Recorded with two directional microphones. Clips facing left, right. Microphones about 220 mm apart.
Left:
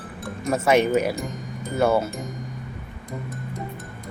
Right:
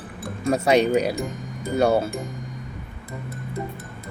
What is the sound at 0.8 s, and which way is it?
Speech, 15° right (ahead or behind).